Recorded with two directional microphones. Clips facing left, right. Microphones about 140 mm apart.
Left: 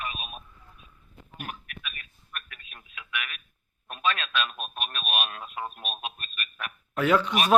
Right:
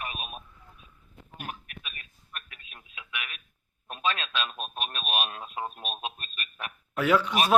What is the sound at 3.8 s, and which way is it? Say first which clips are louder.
Radio: left 1 dB; 25° right (ahead or behind).